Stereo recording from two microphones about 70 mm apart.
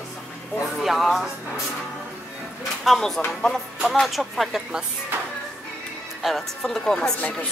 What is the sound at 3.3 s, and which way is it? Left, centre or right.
Music, centre.